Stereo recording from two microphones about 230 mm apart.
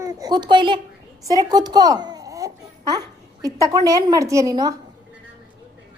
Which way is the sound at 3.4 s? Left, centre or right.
Centre.